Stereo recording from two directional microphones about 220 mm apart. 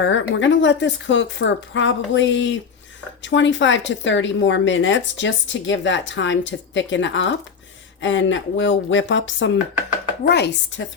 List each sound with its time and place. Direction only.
0.0 s speech: 55° left (ahead or behind)